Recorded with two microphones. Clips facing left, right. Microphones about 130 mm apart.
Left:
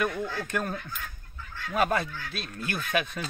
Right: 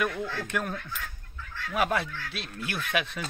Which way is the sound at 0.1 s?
25° left (ahead or behind).